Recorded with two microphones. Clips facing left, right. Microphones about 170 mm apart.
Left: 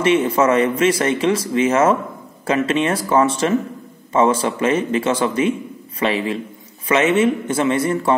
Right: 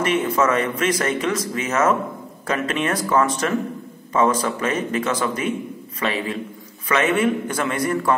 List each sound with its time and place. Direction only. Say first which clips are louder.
0.0 s a man's voice: left 4 dB; 25° left (ahead or behind)